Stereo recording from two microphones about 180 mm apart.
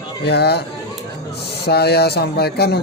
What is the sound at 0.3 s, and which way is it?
Speech, 65° left (ahead or behind).